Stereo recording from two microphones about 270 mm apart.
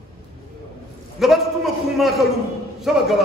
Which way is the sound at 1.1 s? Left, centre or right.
Centre.